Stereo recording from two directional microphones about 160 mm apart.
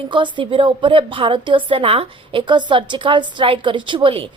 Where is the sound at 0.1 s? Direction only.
30° right (ahead or behind).